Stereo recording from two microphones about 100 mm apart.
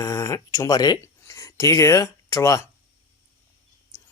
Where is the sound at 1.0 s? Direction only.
30° left (ahead or behind).